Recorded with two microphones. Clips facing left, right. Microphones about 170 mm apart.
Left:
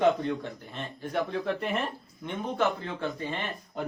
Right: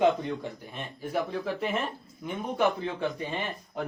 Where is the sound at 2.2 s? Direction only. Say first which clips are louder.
Right 1 dB; 15° right (ahead or behind).